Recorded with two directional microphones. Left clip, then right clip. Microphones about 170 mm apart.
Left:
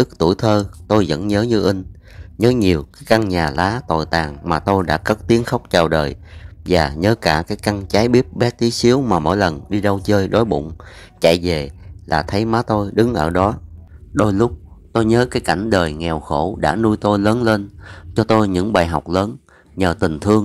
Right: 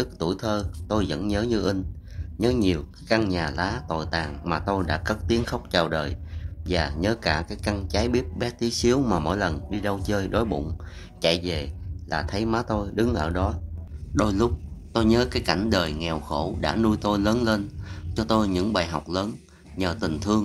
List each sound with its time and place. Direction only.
0.0 s a man's voice: 40° left (ahead or behind)